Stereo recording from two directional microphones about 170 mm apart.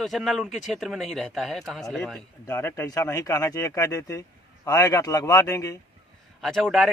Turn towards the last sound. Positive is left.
turn(degrees=0)  # may be behind; listen again after turning